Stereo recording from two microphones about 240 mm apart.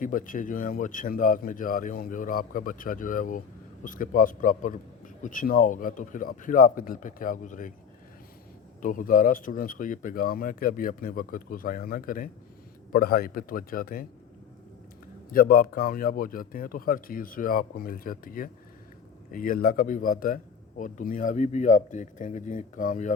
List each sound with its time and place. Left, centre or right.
0.0 s a man's voice: left
8.8 s a man's voice: left
15.3 s a man's voice: left